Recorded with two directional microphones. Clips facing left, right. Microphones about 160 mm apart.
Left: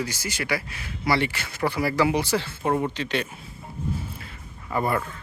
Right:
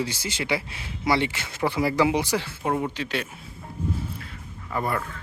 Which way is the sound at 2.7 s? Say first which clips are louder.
Left 2 dB; centre (ahead or behind).